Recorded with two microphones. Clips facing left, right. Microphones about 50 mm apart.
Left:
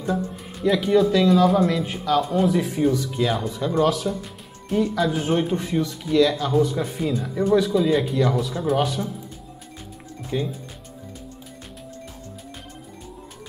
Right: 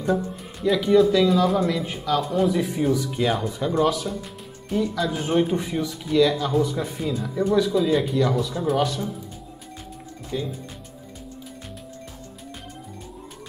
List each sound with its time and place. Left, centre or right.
0.0 s speech: centre
10.3 s speech: left